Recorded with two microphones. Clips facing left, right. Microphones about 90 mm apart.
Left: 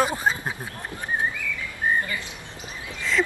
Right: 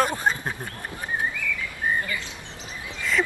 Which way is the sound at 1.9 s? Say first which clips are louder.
Left 2 dB; 20° left (ahead or behind).